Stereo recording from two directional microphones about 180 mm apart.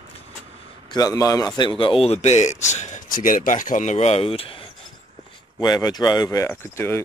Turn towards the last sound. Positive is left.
turn(degrees=15)  # may be behind; listen again after turning